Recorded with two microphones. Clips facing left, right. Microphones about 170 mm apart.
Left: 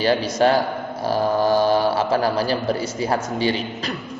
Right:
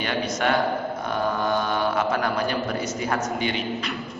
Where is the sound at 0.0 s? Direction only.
35° left (ahead or behind).